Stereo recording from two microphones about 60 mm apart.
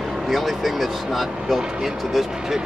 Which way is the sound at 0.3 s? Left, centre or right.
Centre.